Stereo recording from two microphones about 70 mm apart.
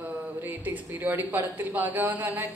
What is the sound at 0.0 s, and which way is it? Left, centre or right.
Speech, right.